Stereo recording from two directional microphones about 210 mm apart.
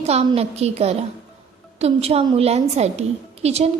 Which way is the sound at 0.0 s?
30° right (ahead or behind).